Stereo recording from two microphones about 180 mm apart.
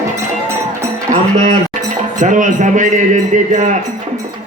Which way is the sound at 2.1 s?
45° right (ahead or behind).